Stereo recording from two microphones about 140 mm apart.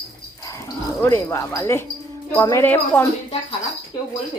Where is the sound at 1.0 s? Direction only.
20° left (ahead or behind).